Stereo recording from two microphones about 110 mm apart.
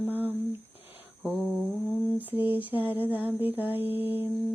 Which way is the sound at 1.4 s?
10° left (ahead or behind).